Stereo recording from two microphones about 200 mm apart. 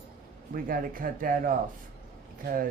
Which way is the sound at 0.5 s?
45° right (ahead or behind).